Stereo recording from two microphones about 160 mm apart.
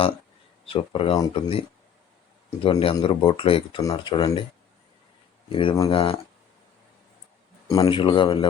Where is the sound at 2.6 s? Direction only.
35° left (ahead or behind).